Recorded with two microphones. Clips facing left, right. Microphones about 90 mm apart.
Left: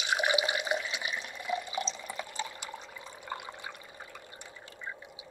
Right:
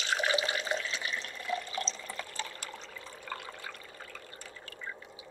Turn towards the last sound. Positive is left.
turn(degrees=20)  # may be behind; listen again after turning